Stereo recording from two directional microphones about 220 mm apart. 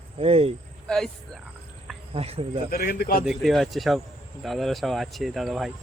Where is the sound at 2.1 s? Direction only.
25° right (ahead or behind).